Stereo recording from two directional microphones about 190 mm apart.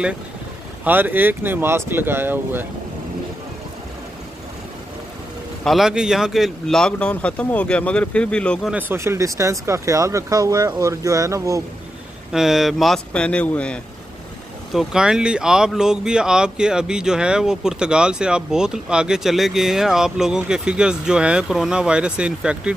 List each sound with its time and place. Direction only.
0.8 s speech: 10° right (ahead or behind)
5.6 s speech: centre (ahead or behind)
8.7 s speech: 10° right (ahead or behind)
12.3 s speech: centre (ahead or behind)